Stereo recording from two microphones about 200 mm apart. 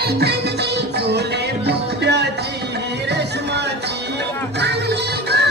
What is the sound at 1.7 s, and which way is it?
Music, 60° right (ahead or behind).